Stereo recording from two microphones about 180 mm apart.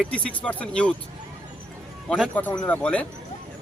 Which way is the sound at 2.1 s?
5° left (ahead or behind).